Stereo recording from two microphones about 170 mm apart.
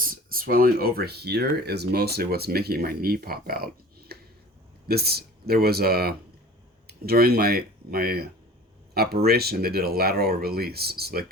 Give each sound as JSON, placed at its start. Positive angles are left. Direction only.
{"t": 0.0, "sound": "speech", "side_deg": -55}
{"t": 4.9, "sound": "speech", "side_deg": -65}